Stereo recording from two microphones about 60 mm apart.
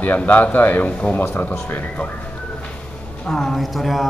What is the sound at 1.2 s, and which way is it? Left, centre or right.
Speech, left.